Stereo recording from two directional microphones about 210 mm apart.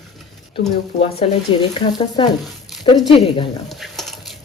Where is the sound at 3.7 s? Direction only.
Centre (ahead or behind).